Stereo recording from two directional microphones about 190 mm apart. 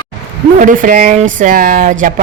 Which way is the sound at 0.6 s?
45° right (ahead or behind).